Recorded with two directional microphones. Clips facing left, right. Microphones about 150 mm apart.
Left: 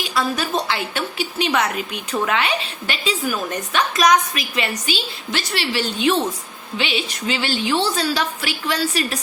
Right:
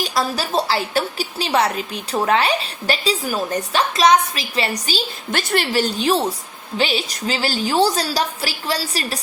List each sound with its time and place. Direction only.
0.0 s a woman's voice: 40° right (ahead or behind)